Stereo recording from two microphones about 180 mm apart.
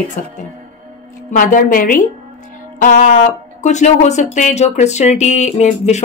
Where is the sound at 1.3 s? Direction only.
50° left (ahead or behind).